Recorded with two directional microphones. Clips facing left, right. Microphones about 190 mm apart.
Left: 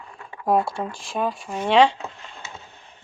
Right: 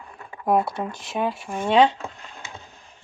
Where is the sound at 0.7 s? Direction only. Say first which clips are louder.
Even; 20° right (ahead or behind).